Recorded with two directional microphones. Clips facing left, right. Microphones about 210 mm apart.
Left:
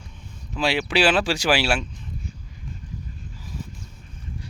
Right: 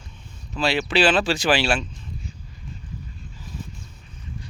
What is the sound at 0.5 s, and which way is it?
Speech, 10° left (ahead or behind).